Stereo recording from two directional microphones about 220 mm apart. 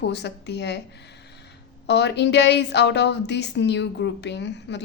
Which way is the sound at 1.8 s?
50° left (ahead or behind).